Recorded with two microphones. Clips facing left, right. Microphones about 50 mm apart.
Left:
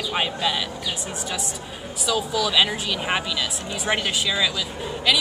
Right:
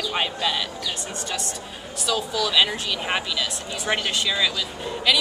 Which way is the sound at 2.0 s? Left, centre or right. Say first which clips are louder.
Left 1 dB; centre.